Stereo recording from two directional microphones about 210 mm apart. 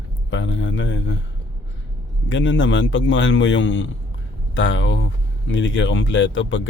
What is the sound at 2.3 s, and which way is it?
Speech, 65° left (ahead or behind).